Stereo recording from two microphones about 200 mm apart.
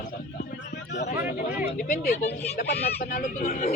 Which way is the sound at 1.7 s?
40° left (ahead or behind).